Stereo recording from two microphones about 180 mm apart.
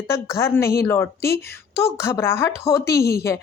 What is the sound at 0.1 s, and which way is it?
A woman's voice, 15° left (ahead or behind).